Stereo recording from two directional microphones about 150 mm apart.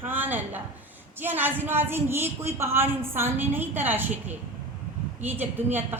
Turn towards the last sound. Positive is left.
turn(degrees=-15)  # may be behind; listen again after turning